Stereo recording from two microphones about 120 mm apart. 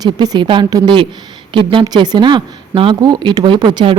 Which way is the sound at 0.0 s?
35° right (ahead or behind).